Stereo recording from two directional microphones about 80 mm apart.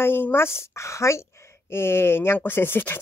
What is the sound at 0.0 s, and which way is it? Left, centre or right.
Speech, left.